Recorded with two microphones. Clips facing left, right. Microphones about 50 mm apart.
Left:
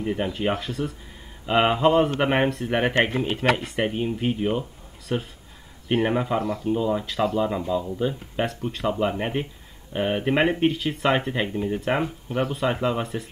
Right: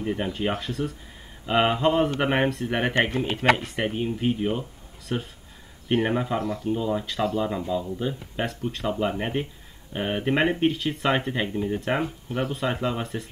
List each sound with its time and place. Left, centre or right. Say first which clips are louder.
0.0 s speech: left 2 dB; centre
12.0 s speech: left 2 dB; left
12.5 s speech: left 3 dB; centre